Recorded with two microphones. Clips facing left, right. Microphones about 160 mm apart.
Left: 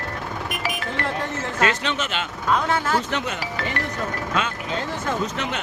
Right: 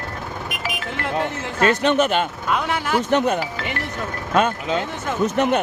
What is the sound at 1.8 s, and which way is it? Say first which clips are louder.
Speech: right 9 dB; 55° right (ahead or behind).